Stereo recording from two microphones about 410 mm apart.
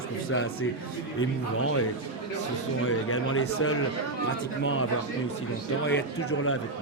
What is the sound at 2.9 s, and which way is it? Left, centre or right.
Speech, left.